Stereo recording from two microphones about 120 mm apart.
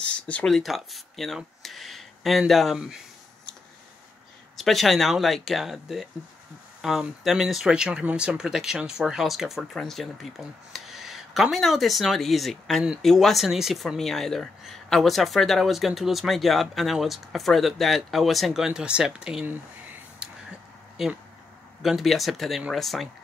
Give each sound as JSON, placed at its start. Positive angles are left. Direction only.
{"t": 0.0, "sound": "speech", "side_deg": 10}
{"t": 4.6, "sound": "speech", "side_deg": 0}
{"t": 20.2, "sound": "a sound", "side_deg": -5}
{"t": 21.0, "sound": "speech", "side_deg": 0}